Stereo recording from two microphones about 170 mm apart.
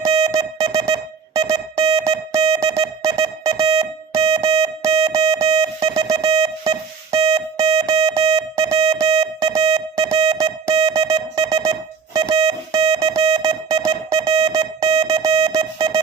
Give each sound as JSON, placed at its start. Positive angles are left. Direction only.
{"t": 0.0, "sound": "music", "side_deg": -25}